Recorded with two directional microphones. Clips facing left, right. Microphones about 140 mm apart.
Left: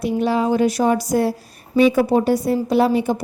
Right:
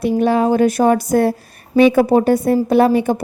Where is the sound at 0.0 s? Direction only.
55° right (ahead or behind).